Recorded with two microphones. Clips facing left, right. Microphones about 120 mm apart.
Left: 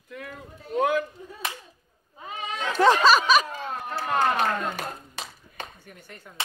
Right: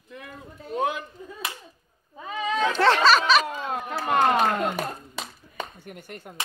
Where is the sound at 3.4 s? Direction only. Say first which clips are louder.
Right 3 dB; 65° right (ahead or behind).